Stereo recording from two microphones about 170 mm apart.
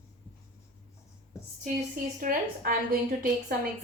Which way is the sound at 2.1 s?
60° right (ahead or behind).